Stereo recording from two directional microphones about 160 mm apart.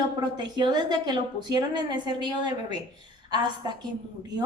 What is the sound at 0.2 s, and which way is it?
A woman's voice, 25° right (ahead or behind).